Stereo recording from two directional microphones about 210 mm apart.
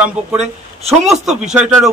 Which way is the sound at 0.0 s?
5° right (ahead or behind).